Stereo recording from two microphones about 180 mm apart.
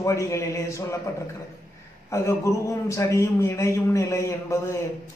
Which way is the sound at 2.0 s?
15° left (ahead or behind).